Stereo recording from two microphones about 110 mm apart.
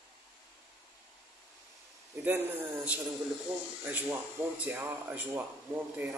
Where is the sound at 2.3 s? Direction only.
20° right (ahead or behind).